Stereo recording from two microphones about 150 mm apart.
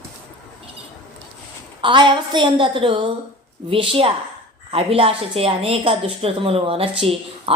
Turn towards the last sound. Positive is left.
turn(degrees=-40)  # may be behind; listen again after turning